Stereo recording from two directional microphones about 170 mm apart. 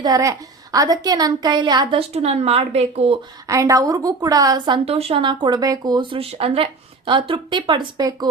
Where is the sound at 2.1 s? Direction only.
35° right (ahead or behind).